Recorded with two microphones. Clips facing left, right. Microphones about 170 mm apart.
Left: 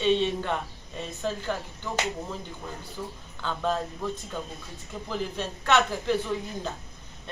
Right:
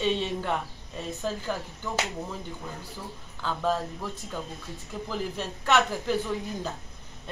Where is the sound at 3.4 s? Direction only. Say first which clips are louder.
Right 1 dB; 5° right (ahead or behind).